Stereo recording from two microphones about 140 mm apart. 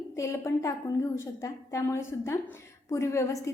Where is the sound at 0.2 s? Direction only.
20° left (ahead or behind).